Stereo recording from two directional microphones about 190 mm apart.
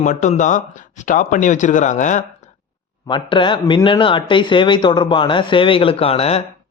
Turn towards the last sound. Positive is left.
turn(degrees=30)  # may be behind; listen again after turning